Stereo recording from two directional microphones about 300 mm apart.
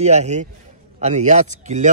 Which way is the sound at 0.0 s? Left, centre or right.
Right.